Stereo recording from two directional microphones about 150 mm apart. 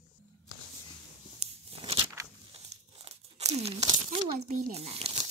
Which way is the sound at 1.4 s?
45° right (ahead or behind).